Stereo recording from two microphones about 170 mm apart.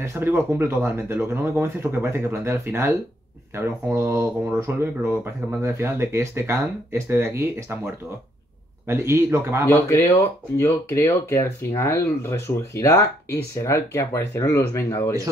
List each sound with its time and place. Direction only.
0.0 s speech: 15° right (ahead or behind)
9.7 s speech: 15° left (ahead or behind)